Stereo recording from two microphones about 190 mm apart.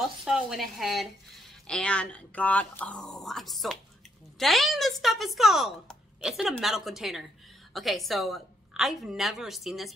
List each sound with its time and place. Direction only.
0.2 s speech: 5° right (ahead or behind)